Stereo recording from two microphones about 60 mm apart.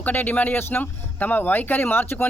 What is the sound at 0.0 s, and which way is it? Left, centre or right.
Speech, left.